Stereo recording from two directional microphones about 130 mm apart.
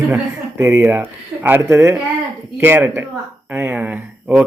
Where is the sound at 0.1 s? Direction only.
20° right (ahead or behind).